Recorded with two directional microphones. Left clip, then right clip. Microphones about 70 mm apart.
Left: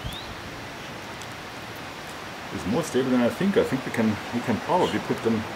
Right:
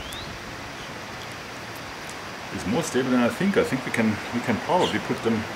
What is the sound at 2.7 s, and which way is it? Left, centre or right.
Speech, right.